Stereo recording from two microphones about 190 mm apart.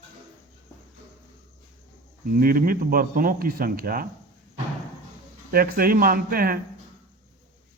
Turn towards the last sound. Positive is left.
turn(degrees=-50)  # may be behind; listen again after turning